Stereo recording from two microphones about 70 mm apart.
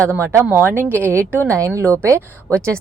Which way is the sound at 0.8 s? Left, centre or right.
Left.